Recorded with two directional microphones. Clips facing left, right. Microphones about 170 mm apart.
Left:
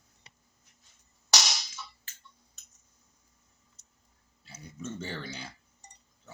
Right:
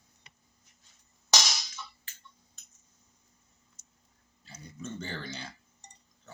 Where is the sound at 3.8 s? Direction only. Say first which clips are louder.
Right 2 dB; centre (ahead or behind).